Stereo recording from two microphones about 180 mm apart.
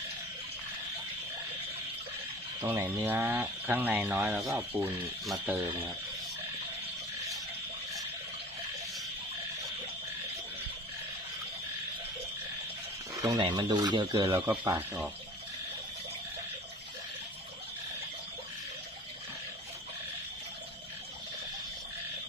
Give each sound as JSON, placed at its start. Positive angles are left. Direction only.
{"t": 2.6, "sound": "speech", "side_deg": -15}
{"t": 13.2, "sound": "speech", "side_deg": -25}
{"t": 14.5, "sound": "speech", "side_deg": -10}